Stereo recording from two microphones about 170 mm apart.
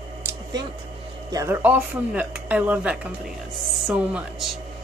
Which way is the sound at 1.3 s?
15° right (ahead or behind).